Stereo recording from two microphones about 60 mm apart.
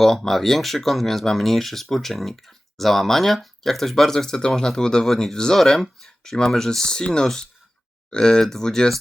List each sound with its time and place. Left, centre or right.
0.0 s speech: centre